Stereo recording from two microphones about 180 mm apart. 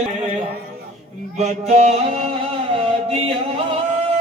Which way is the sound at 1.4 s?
40° right (ahead or behind).